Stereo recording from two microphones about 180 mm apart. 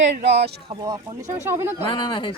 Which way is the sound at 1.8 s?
25° left (ahead or behind).